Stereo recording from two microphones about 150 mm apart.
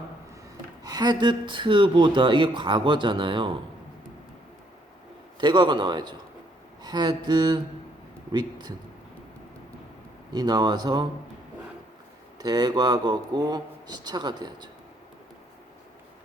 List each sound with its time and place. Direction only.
0.9 s speech: 25° right (ahead or behind)
5.4 s speech: 30° right (ahead or behind)
10.3 s speech: 25° right (ahead or behind)
12.4 s speech: 25° right (ahead or behind)